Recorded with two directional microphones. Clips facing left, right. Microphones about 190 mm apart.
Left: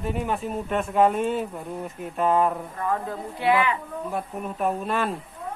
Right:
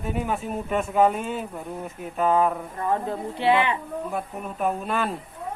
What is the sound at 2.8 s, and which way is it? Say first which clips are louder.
Speech: right 3 dB; 25° right (ahead or behind).